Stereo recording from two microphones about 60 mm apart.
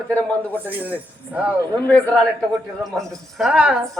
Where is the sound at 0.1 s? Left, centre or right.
Left.